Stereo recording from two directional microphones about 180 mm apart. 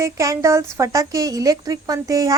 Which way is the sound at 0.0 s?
15° right (ahead or behind).